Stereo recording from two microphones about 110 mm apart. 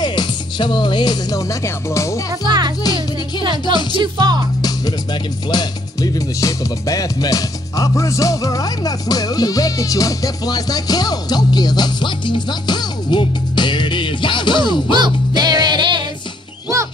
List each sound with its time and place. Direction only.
0.0 s music: 40° left (ahead or behind)
2.4 s music: 45° right (ahead or behind)
2.8 s music: 35° left (ahead or behind)
3.9 s music: 45° right (ahead or behind)
4.6 s music: 35° left (ahead or behind)
15.0 s music: 40° right (ahead or behind)